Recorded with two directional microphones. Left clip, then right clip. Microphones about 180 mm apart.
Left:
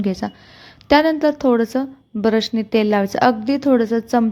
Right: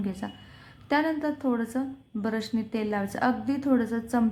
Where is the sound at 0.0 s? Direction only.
35° left (ahead or behind).